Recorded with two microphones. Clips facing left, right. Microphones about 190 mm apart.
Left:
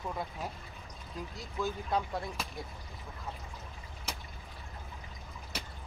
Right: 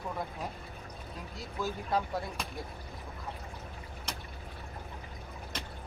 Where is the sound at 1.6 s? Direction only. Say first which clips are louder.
Even; centre (ahead or behind).